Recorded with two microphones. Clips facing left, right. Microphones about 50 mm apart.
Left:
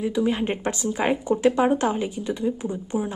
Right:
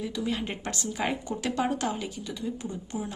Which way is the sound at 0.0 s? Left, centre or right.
Left.